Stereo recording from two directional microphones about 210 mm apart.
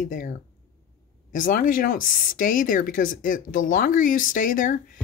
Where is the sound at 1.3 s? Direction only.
40° left (ahead or behind).